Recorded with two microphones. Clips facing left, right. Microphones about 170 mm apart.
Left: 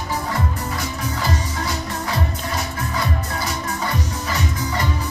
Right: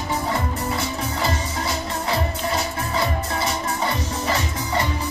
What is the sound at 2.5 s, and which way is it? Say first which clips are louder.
Music: even; 25° right (ahead or behind).